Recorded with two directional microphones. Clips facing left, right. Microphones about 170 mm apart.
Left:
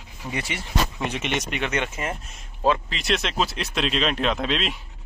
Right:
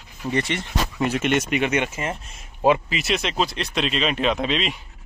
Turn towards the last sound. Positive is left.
turn(degrees=0)  # may be behind; listen again after turning